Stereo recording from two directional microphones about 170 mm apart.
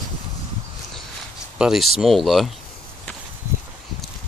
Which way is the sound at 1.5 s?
5° right (ahead or behind).